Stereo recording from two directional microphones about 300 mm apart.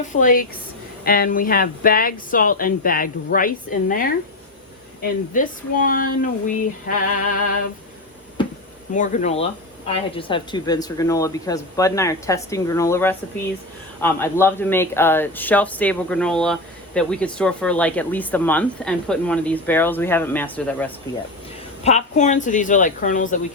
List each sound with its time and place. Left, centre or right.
0.1 s speech: left
5.3 s speech: left
9.0 s speech: left; by 20.9 s centre
21.8 s speech: left